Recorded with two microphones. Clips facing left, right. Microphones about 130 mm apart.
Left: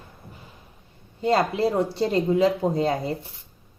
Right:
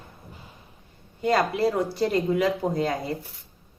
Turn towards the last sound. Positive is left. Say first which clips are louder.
# left 3 dB
turn(degrees=30)  # may be behind; listen again after turning